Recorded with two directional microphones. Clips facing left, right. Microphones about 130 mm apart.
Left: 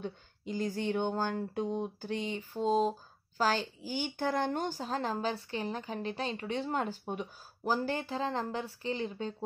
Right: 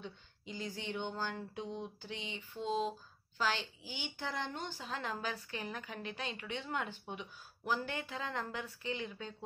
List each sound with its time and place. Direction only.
0.0 s speech: 45° left (ahead or behind)